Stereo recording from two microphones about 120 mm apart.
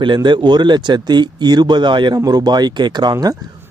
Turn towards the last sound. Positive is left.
turn(degrees=-30)  # may be behind; listen again after turning